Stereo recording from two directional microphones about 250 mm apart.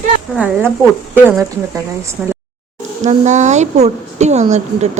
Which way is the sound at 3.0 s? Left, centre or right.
Right.